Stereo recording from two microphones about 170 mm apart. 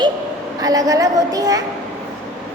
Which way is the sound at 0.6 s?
20° right (ahead or behind).